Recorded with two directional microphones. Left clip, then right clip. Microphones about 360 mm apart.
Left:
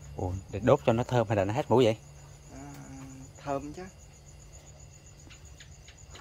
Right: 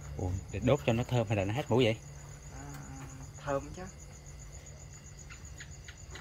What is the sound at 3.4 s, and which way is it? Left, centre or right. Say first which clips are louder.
Speech: left 1 dB; left.